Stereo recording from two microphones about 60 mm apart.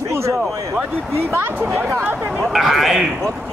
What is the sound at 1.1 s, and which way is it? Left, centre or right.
Speech, right.